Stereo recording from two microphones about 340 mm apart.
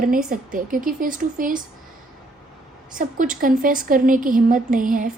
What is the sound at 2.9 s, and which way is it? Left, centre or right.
A woman's voice, right.